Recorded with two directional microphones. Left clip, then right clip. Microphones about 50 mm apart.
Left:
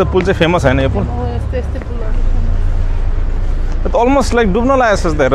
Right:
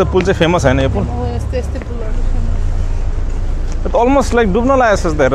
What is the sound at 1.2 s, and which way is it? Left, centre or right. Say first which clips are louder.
Speech: even; right.